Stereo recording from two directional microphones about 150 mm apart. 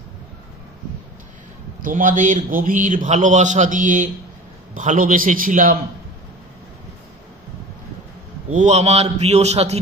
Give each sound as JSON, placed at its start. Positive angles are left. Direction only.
{"t": 1.8, "sound": "a man's voice", "side_deg": -60}
{"t": 8.5, "sound": "a man's voice", "side_deg": -50}